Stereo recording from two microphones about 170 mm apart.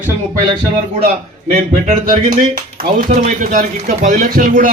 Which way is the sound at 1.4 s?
55° right (ahead or behind).